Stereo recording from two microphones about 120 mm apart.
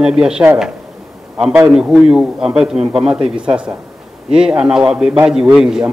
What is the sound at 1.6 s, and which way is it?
A man's voice, 5° right (ahead or behind).